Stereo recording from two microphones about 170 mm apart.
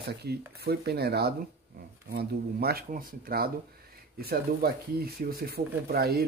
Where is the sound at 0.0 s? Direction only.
75° right (ahead or behind).